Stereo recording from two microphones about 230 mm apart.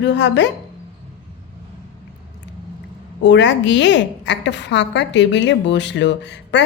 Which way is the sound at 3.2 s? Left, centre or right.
Left.